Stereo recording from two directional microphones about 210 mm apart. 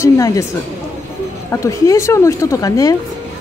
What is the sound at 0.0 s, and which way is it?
Speech, 15° left (ahead or behind).